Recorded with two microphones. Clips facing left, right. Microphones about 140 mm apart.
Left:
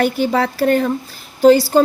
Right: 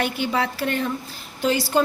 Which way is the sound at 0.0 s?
40° left (ahead or behind).